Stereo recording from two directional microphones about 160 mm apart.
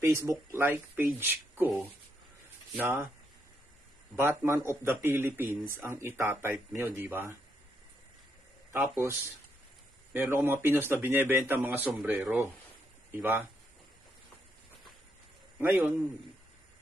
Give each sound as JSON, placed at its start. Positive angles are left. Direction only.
{"t": 0.0, "sound": "speech", "side_deg": -15}
{"t": 2.8, "sound": "speech", "side_deg": -10}
{"t": 4.2, "sound": "speech", "side_deg": -15}
{"t": 8.7, "sound": "speech", "side_deg": -15}
{"t": 10.1, "sound": "speech", "side_deg": -10}
{"t": 15.6, "sound": "speech", "side_deg": -15}